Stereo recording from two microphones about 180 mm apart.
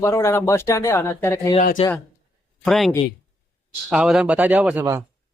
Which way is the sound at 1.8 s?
35° left (ahead or behind).